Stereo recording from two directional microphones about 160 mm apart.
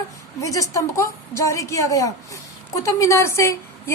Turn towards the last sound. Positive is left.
turn(degrees=15)  # may be behind; listen again after turning